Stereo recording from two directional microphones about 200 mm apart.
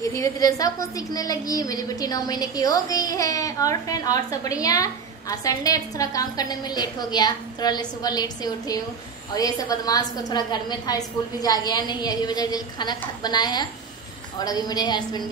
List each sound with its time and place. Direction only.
0.0 s a woman's voice: 15° left (ahead or behind)